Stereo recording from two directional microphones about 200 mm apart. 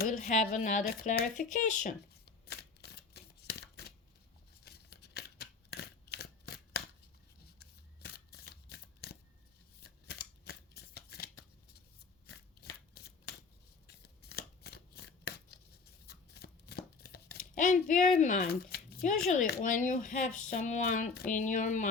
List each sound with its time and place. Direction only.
0.3 s speech: 35° left (ahead or behind)
2.5 s a sound: 55° left (ahead or behind)
4.6 s scissors: 55° left (ahead or behind)
7.6 s shuffling cards: 55° left (ahead or behind)
12.5 s shuffling cards: 50° left (ahead or behind)
14.3 s shuffling cards: 50° left (ahead or behind)
16.0 s speech: 55° left (ahead or behind)